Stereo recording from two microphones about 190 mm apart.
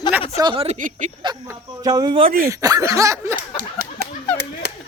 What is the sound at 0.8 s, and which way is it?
Speech, 45° right (ahead or behind).